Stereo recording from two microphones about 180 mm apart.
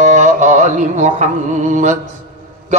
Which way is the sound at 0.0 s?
45° right (ahead or behind).